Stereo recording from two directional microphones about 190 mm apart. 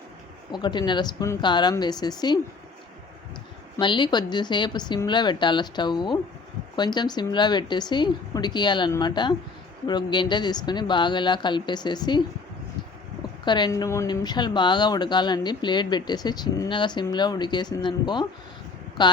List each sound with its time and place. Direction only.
0.5 s speech: 25° left (ahead or behind)
3.8 s speech: 25° left (ahead or behind)
13.4 s speech: 25° left (ahead or behind)